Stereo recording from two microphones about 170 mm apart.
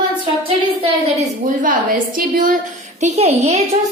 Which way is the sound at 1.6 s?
55° right (ahead or behind).